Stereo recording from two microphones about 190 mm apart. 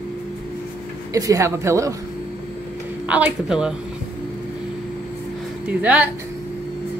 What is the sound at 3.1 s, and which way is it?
Speech, 5° right (ahead or behind).